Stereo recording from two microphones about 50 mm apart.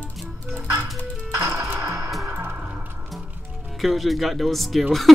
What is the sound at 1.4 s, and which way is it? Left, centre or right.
Music, right.